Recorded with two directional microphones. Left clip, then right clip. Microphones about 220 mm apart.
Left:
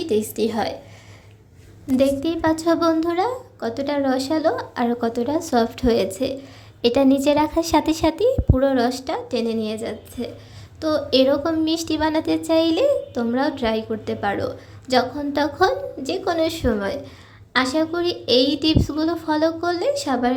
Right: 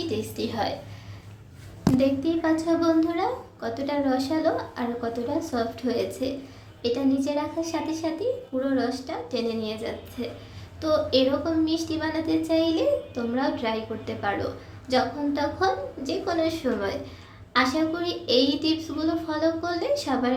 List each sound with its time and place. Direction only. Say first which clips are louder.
0.1 s a woman's voice: left 8 dB; 35° left (ahead or behind)
2.0 s a woman's voice: left 6 dB; 40° left (ahead or behind)